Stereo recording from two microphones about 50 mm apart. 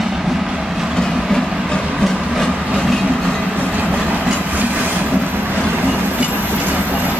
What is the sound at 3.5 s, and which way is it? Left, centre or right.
Train, right.